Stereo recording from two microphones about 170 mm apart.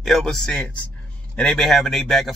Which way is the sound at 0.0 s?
Centre (ahead or behind).